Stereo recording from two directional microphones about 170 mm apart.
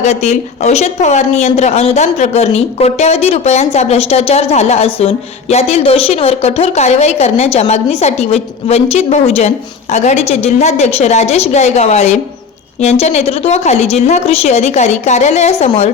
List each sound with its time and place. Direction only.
0.0 s speech: 40° left (ahead or behind)